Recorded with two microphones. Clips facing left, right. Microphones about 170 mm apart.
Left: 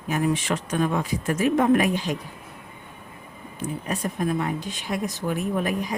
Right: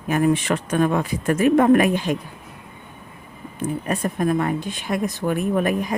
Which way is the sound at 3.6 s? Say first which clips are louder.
Right 5 dB; 55° right (ahead or behind).